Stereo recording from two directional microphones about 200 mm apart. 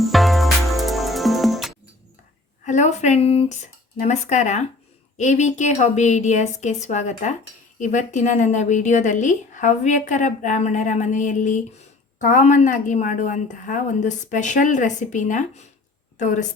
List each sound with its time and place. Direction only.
0.0 s music: centre (ahead or behind)
2.6 s a woman's voice: 35° left (ahead or behind)